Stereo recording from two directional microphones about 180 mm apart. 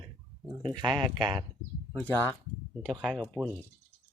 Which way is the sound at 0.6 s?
25° right (ahead or behind).